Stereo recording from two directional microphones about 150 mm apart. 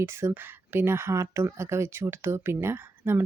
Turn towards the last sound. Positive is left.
turn(degrees=-15)  # may be behind; listen again after turning